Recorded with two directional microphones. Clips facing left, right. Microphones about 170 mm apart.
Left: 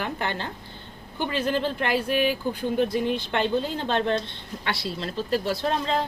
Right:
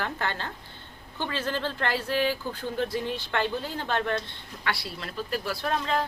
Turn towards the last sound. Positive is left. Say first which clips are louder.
# left 2 dB
turn(degrees=25)  # may be behind; listen again after turning